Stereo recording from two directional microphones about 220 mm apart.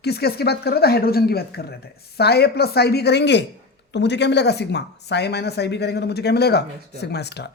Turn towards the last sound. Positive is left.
turn(degrees=50)  # may be behind; listen again after turning